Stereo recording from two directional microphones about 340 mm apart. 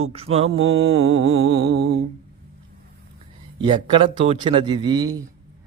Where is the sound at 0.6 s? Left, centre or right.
Right.